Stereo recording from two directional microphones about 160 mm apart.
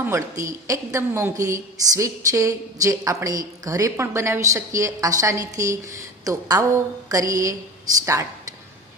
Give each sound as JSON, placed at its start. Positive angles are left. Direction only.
{"t": 0.0, "sound": "a woman's voice", "side_deg": -15}